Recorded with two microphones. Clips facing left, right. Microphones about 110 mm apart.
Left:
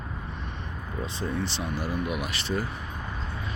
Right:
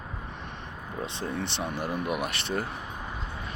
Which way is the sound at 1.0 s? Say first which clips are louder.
Left 2 dB; 65° right (ahead or behind).